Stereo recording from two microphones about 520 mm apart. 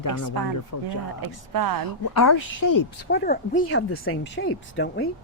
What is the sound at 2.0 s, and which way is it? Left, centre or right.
Speech, left.